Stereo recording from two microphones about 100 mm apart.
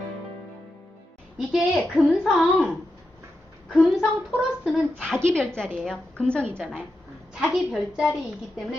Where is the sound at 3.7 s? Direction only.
Centre (ahead or behind).